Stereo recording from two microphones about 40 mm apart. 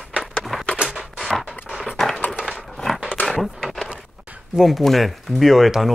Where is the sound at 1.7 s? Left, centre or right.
Centre.